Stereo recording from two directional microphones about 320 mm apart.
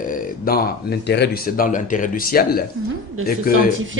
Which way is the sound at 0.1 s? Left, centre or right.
Left.